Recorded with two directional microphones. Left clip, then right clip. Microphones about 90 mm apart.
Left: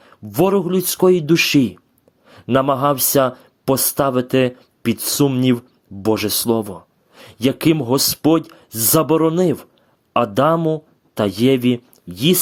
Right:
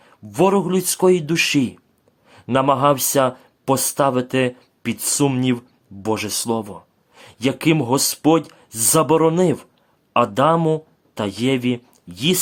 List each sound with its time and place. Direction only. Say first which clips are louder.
0.0 s speech: even; 40° left (ahead or behind)
10.6 s speech: even; 20° left (ahead or behind)
11.1 s speech: left 5 dB; 40° left (ahead or behind)